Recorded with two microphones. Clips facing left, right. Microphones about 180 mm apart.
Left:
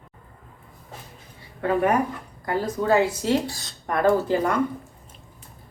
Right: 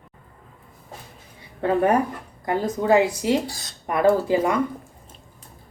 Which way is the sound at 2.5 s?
20° right (ahead or behind).